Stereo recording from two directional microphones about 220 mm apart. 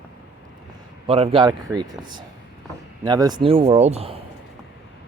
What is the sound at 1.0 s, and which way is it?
Speech, 25° right (ahead or behind).